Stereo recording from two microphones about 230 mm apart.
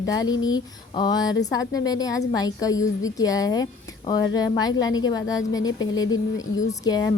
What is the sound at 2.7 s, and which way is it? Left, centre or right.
Speech, left.